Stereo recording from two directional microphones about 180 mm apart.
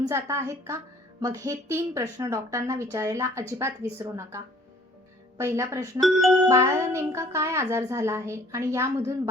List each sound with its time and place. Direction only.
0.1 s a woman's voice: 15° right (ahead or behind)
6.0 s speech: centre (ahead or behind)
6.5 s a woman's voice: 15° right (ahead or behind)